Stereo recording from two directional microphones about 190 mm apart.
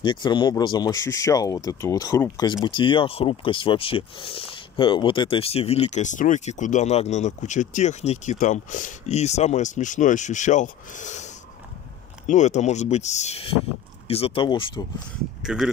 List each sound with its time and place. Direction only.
0.0 s speech: 25° left (ahead or behind); by 11.2 s 40° left (ahead or behind)
12.3 s speech: 40° left (ahead or behind)
15.4 s speech: 5° right (ahead or behind)